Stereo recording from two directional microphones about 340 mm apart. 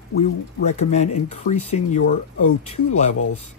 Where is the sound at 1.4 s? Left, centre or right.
Centre.